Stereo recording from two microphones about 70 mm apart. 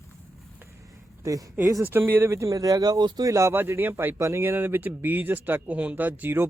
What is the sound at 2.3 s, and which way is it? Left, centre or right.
Speech, right.